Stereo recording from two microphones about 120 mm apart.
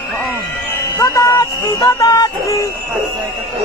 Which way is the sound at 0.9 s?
25° left (ahead or behind).